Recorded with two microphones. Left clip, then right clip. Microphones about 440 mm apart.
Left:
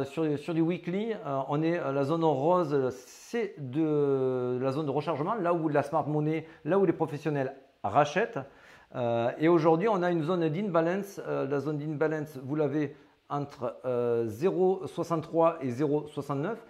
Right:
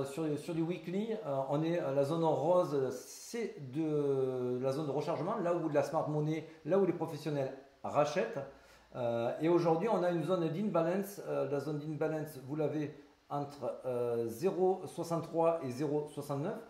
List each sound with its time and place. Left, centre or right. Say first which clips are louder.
0.1 s a man's voice: left 7 dB; left